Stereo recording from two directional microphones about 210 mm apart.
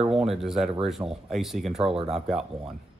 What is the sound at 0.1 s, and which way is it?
Speech, centre (ahead or behind).